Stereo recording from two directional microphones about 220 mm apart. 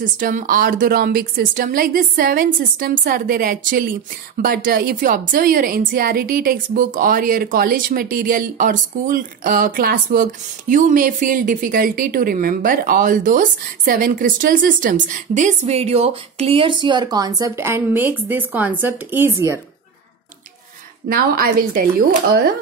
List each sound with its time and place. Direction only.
0.0 s speech: 35° right (ahead or behind); by 19.6 s 10° right (ahead or behind)
21.1 s speech: 40° right (ahead or behind)